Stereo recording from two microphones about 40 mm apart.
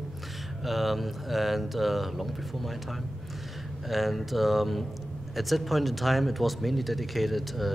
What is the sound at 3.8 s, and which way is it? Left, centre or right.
Speech, centre.